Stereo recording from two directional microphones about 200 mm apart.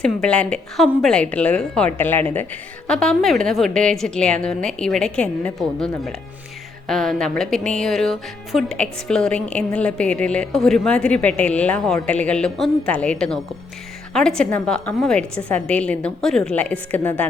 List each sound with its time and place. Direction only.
0.0 s a woman's voice: 5° left (ahead or behind)